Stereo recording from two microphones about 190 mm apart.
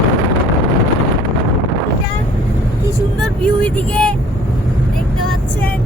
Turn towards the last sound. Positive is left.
turn(degrees=5)  # may be behind; listen again after turning